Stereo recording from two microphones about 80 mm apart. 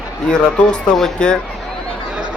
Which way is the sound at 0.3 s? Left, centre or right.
Centre.